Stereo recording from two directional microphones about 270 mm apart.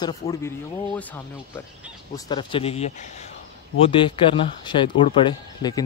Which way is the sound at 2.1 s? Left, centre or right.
Centre.